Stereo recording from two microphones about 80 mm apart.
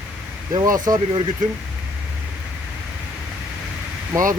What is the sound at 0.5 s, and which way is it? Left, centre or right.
Speech, right.